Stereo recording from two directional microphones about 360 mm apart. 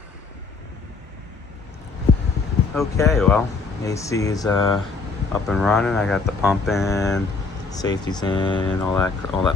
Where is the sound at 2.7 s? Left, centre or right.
Centre.